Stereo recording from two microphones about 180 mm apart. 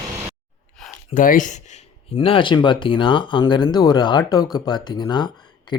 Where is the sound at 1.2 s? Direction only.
45° left (ahead or behind).